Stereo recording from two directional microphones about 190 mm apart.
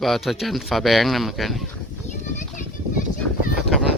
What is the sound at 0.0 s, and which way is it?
Speech, centre (ahead or behind).